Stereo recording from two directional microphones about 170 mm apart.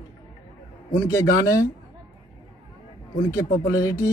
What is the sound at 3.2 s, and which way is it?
Speech, 20° left (ahead or behind).